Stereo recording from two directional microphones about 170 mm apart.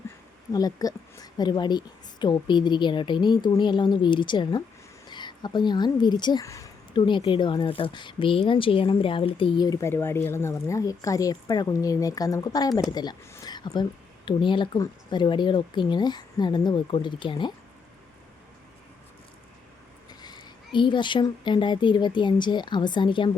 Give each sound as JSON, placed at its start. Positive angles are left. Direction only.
{"t": 0.5, "sound": "speech", "side_deg": 20}
{"t": 6.9, "sound": "speech", "side_deg": 30}
{"t": 20.1, "sound": "speech", "side_deg": 25}